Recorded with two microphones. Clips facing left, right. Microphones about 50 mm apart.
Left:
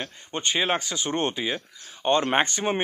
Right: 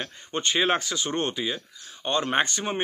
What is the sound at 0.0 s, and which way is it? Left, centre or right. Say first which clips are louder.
Speech: right 1 dB; centre.